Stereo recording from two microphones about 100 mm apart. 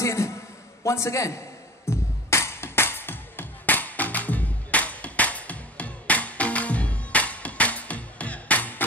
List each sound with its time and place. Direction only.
0.0 s a sound: 30° left (ahead or behind)
0.8 s a man's voice: 30° left (ahead or behind)
1.9 s music: 25° left (ahead or behind)